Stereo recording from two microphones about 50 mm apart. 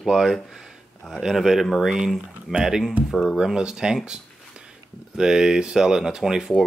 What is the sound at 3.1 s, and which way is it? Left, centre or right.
Speech, centre.